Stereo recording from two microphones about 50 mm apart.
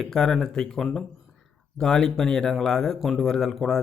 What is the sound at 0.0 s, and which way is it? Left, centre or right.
Speech, centre.